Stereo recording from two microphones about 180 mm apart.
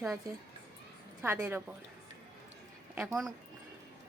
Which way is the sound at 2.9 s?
Centre (ahead or behind).